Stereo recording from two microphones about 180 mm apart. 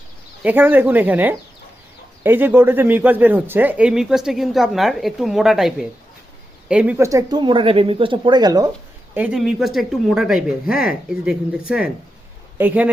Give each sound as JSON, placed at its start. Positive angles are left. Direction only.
{"t": 0.4, "sound": "speech", "side_deg": -10}
{"t": 9.1, "sound": "speech", "side_deg": -5}